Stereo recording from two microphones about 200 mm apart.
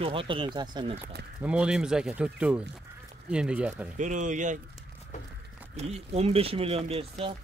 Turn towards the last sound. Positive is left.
turn(degrees=-30)  # may be behind; listen again after turning